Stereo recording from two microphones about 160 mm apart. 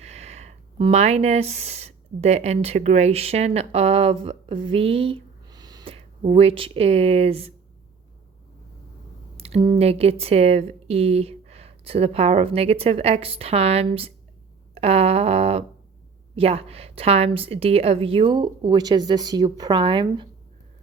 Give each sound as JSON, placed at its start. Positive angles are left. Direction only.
{"t": 0.0, "sound": "speech", "side_deg": -45}
{"t": 5.9, "sound": "speech", "side_deg": -35}
{"t": 9.6, "sound": "speech", "side_deg": -35}
{"t": 14.8, "sound": "a sound", "side_deg": -40}
{"t": 16.3, "sound": "speech", "side_deg": -40}